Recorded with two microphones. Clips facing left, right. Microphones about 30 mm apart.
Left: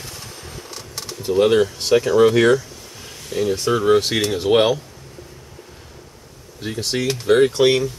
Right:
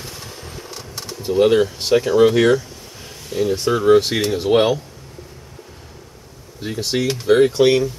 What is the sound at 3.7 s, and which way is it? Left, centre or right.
Speech, centre.